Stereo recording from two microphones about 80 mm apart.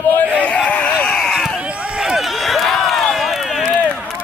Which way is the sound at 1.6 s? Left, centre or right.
Centre.